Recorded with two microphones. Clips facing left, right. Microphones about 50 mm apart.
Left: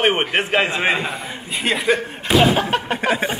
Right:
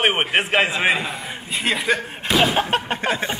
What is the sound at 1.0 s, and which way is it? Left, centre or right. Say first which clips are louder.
Speech: left 2 dB; centre.